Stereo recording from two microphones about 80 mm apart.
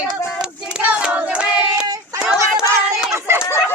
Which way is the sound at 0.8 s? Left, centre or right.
Centre.